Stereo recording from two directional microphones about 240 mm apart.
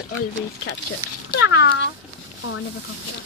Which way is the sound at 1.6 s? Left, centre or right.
Left.